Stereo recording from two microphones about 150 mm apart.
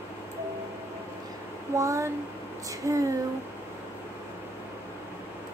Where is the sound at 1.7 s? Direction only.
20° right (ahead or behind).